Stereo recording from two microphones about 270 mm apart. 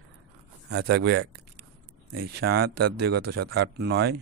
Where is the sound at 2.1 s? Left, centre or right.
Right.